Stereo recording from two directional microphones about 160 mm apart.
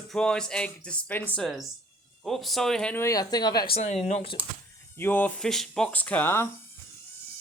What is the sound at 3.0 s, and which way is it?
Speech, 20° left (ahead or behind).